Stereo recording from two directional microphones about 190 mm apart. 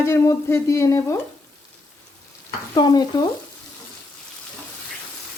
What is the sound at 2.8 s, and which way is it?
Stir, 20° left (ahead or behind).